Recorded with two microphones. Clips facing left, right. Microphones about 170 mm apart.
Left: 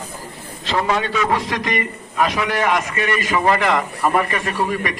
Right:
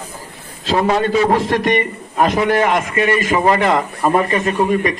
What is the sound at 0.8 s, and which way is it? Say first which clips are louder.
Speech: right 6 dB; 40° right (ahead or behind).